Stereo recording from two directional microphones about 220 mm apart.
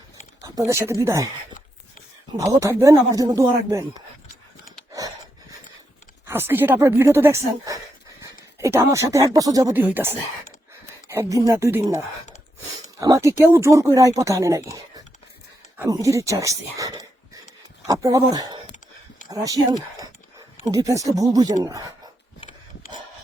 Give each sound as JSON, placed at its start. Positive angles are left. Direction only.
{"t": 0.4, "sound": "speech", "side_deg": -15}
{"t": 2.4, "sound": "speech", "side_deg": -15}
{"t": 6.2, "sound": "speech", "side_deg": -10}
{"t": 20.7, "sound": "speech", "side_deg": -15}